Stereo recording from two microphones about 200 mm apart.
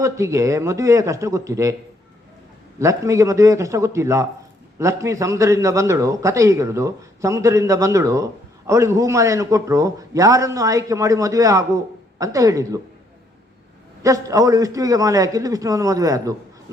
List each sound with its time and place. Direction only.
0.0 s a man's voice: 15° right (ahead or behind)
2.7 s a man's voice: 15° right (ahead or behind)
14.0 s a man's voice: 15° right (ahead or behind)